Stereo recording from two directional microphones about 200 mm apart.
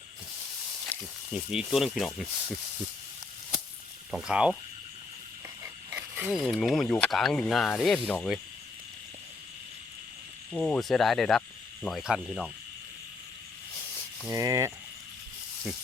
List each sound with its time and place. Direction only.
1.3 s speech: 5° right (ahead or behind)
4.1 s speech: 5° right (ahead or behind)
5.9 s speech: 5° right (ahead or behind)
10.5 s speech: 5° left (ahead or behind)
14.3 s a sound: 15° right (ahead or behind)